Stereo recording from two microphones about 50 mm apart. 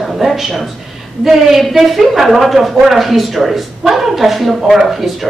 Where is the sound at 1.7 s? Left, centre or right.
Centre.